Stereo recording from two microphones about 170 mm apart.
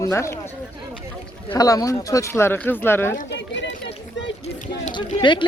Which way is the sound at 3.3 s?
90° left.